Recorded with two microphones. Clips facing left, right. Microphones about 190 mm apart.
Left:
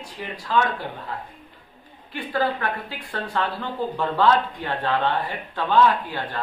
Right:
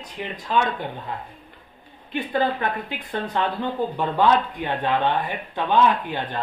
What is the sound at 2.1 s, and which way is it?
A woman's voice, 20° right (ahead or behind).